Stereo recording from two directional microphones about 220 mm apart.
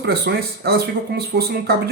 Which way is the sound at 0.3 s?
50° right (ahead or behind).